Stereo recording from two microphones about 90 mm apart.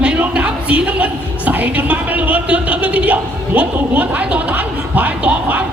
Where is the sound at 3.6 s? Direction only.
20° right (ahead or behind).